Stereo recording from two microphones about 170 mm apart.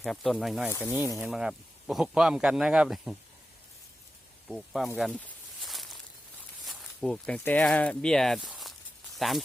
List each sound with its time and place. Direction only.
0.0 s speech: centre (ahead or behind)
0.7 s speech: 15° left (ahead or behind)
1.2 s speech: 5° right (ahead or behind)
4.4 s speech: centre (ahead or behind)
5.2 s walk: centre (ahead or behind)
6.7 s speech: 5° left (ahead or behind)